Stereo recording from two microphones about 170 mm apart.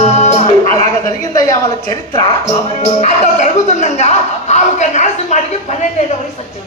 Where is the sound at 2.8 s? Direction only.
45° left (ahead or behind).